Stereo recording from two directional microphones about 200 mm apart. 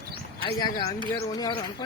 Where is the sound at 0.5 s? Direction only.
20° left (ahead or behind).